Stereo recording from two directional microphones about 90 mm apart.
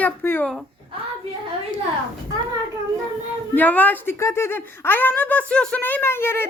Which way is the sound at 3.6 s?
20° left (ahead or behind).